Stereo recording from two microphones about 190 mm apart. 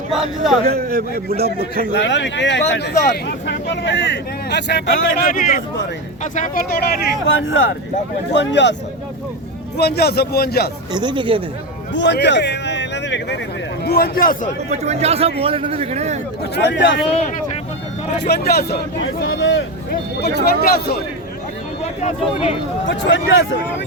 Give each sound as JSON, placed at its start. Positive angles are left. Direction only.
{"t": 0.7, "sound": "a man's voice", "side_deg": -55}
{"t": 1.9, "sound": "speech", "side_deg": 65}
{"t": 7.3, "sound": "speech", "side_deg": 90}
{"t": 8.3, "sound": "speech", "side_deg": 65}
{"t": 9.7, "sound": "speech", "side_deg": 55}
{"t": 10.9, "sound": "speech", "side_deg": -25}
{"t": 11.9, "sound": "speech", "side_deg": 65}
{"t": 13.8, "sound": "speech", "side_deg": 55}
{"t": 14.7, "sound": "a man's voice", "side_deg": -35}
{"t": 16.6, "sound": "speech", "side_deg": 70}
{"t": 18.2, "sound": "speech", "side_deg": 55}
{"t": 20.2, "sound": "speech", "side_deg": 55}
{"t": 22.0, "sound": "speech", "side_deg": 35}
{"t": 22.9, "sound": "speech", "side_deg": 90}